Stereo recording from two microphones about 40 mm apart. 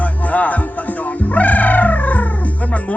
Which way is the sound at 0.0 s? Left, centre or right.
Left.